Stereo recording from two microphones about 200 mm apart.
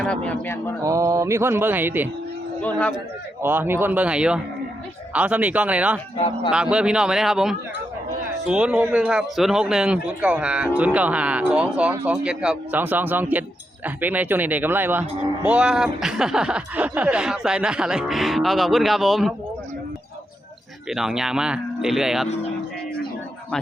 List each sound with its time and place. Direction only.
0.0 s speech: 5° left (ahead or behind)
0.8 s speech: 15° right (ahead or behind)
2.6 s speech: 10° left (ahead or behind)
3.4 s speech: 10° right (ahead or behind)
6.1 s speech: 30° left (ahead or behind)
6.5 s speech: 5° right (ahead or behind)
20.9 s speech: 5° right (ahead or behind)